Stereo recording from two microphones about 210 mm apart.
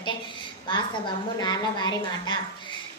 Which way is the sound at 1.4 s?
20° left (ahead or behind).